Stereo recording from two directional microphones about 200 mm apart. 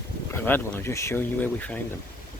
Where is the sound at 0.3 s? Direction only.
10° left (ahead or behind).